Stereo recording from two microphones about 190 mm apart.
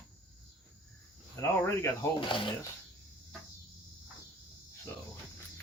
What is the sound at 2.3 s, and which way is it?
Speech, 25° left (ahead or behind).